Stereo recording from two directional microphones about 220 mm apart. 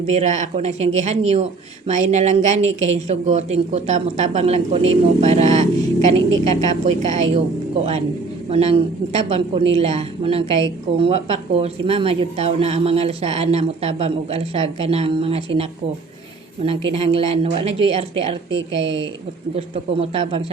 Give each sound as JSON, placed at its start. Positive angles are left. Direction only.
{"t": 0.0, "sound": "speech", "side_deg": -30}
{"t": 8.4, "sound": "speech", "side_deg": -30}
{"t": 16.6, "sound": "speech", "side_deg": -25}
{"t": 18.5, "sound": "a woman's voice", "side_deg": -55}
{"t": 19.5, "sound": "speech", "side_deg": -25}